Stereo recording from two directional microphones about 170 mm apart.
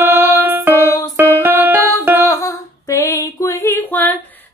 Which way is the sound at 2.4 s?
15° left (ahead or behind).